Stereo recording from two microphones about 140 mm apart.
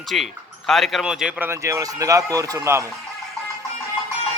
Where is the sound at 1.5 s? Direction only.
20° right (ahead or behind).